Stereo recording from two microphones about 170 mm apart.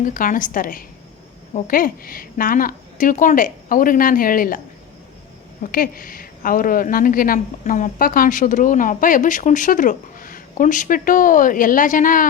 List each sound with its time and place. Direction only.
0.0 s a woman's voice: 50° left (ahead or behind)
5.7 s a woman's voice: 55° left (ahead or behind)